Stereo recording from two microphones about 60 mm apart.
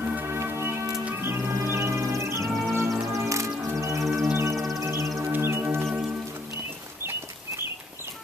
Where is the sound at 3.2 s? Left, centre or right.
Right.